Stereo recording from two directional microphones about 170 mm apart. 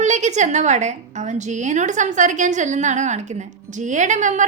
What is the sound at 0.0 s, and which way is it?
A woman's voice, 45° right (ahead or behind).